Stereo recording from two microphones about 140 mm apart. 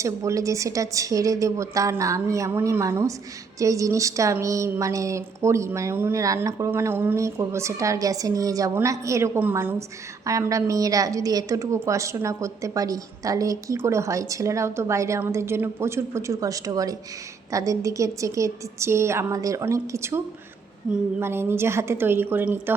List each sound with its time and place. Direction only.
0.0 s a woman's voice: 20° right (ahead or behind)
20.9 s a sound: 5° right (ahead or behind)
21.2 s a woman's voice: 15° right (ahead or behind)